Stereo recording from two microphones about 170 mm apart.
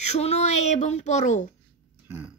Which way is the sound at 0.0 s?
40° left (ahead or behind).